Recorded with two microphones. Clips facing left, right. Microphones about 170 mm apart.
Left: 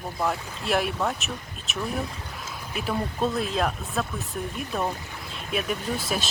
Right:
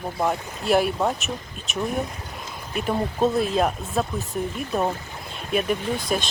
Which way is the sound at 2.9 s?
35° right (ahead or behind).